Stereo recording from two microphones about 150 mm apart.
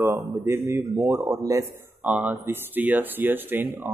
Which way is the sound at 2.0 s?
10° right (ahead or behind).